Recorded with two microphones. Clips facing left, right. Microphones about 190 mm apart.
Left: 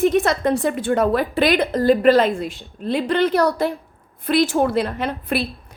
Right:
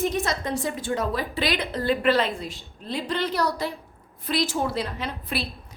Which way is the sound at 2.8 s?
60° left (ahead or behind).